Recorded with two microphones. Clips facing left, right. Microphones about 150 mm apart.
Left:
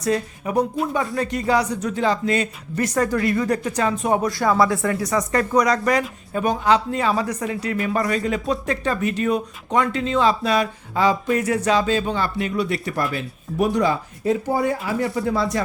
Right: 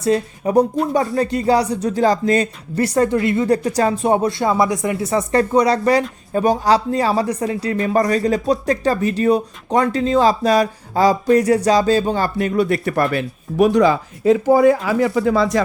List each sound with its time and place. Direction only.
0.0 s speech: 30° right (ahead or behind); by 15.6 s 90° right